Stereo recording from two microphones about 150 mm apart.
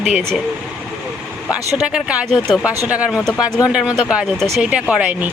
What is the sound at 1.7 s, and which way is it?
Speech, 5° right (ahead or behind).